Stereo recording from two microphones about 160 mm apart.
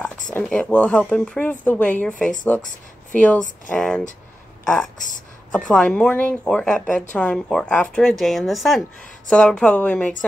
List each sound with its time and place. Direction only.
0.3 s a woman's voice: 5° left (ahead or behind)
4.9 s speech: 55° left (ahead or behind)
5.5 s a woman's voice: 5° left (ahead or behind)